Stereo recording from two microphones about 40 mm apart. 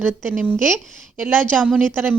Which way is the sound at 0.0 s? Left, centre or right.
Right.